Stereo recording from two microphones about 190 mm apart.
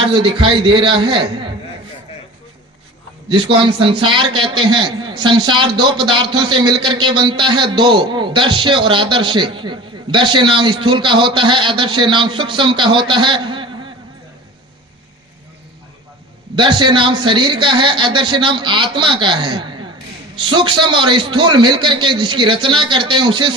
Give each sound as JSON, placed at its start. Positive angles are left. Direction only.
{"t": 0.0, "sound": "a man's voice", "side_deg": -25}
{"t": 3.2, "sound": "a man's voice", "side_deg": -25}
{"t": 16.6, "sound": "a man's voice", "side_deg": -25}